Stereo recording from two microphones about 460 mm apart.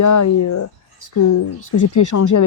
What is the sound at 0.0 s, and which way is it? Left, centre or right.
Speech, left.